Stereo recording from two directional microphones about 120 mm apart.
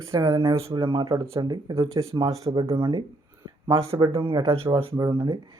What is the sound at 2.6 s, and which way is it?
Speech, 50° right (ahead or behind).